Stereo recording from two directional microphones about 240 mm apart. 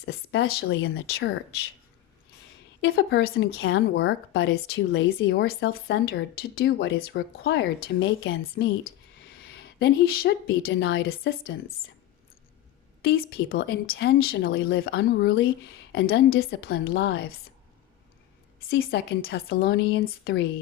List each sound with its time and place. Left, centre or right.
0.0 s a woman's voice: left
2.8 s a woman's voice: left
13.0 s a woman's voice: left
18.7 s speech: left